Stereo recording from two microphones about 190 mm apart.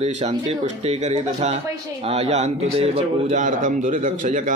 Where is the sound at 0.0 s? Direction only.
35° right (ahead or behind).